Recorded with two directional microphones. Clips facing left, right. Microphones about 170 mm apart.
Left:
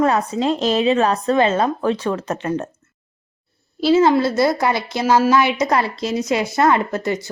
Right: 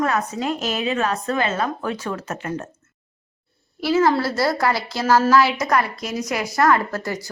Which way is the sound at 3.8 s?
25° left (ahead or behind).